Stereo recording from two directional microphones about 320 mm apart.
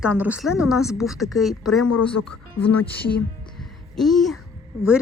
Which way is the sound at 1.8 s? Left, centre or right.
Left.